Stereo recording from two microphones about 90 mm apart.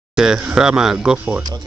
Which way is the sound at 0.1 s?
5° right (ahead or behind).